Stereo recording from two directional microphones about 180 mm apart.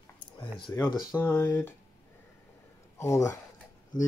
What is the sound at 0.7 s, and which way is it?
Speech, 15° left (ahead or behind).